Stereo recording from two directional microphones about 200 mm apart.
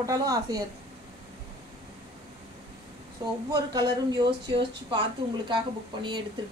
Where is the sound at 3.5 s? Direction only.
20° right (ahead or behind).